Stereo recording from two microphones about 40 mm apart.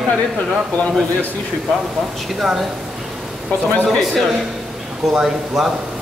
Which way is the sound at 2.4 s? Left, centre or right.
Centre.